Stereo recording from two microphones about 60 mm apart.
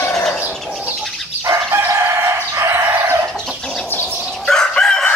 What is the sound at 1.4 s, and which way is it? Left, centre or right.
Chicken, right.